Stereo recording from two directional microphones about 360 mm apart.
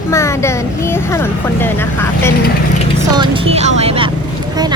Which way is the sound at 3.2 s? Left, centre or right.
Centre.